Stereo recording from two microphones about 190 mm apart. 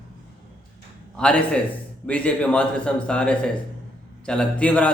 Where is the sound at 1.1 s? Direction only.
5° left (ahead or behind).